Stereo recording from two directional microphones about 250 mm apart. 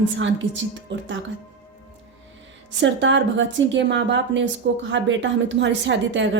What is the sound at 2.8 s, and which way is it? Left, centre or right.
A woman's voice, right.